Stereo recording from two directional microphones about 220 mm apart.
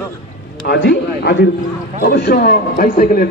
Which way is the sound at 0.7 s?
50° left (ahead or behind).